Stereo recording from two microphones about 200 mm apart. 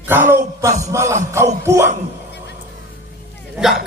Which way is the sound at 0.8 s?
15° right (ahead or behind).